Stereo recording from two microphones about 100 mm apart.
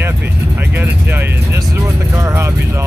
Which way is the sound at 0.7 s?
20° right (ahead or behind).